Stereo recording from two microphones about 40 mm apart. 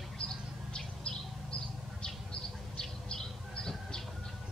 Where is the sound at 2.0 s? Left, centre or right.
Left.